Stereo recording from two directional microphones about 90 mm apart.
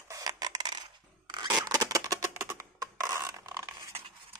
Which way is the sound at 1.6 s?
45° right (ahead or behind).